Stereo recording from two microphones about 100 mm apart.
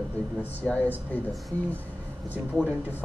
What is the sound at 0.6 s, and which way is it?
Speech, 5° left (ahead or behind).